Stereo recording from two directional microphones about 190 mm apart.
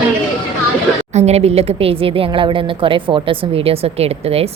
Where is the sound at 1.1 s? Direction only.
35° right (ahead or behind).